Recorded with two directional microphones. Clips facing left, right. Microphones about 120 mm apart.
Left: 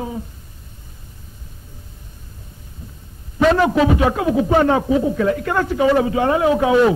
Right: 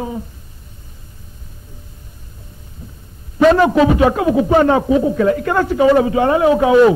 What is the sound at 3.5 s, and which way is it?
A man's voice, 35° right (ahead or behind).